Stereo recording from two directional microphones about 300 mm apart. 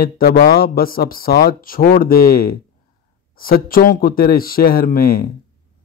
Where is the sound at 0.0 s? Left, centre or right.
Left.